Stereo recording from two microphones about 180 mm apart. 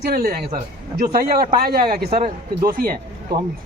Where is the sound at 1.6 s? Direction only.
55° right (ahead or behind).